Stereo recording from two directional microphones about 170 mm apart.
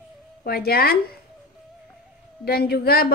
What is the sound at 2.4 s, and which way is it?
Speech, 65° left (ahead or behind).